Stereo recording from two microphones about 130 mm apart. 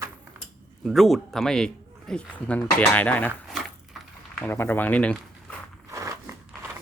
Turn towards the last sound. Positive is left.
turn(degrees=-25)  # may be behind; listen again after turning